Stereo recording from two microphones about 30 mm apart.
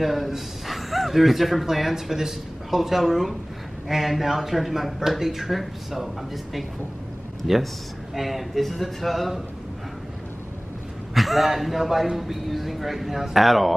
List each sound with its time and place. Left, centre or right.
0.0 s speech: centre
7.4 s speech: centre
8.1 s speech: centre
11.1 s speech: centre